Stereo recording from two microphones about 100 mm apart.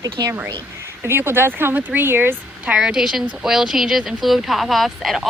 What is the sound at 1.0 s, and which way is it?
Speech, 20° right (ahead or behind).